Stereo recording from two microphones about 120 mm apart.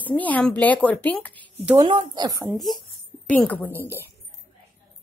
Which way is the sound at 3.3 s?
15° left (ahead or behind).